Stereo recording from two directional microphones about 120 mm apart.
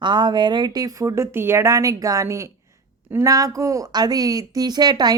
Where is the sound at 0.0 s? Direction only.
40° right (ahead or behind).